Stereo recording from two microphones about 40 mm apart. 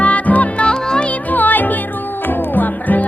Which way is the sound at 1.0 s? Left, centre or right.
Left.